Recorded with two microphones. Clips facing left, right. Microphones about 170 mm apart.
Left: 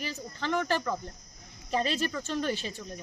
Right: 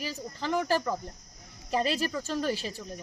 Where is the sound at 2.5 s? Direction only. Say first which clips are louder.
Right 1 dB; 35° right (ahead or behind).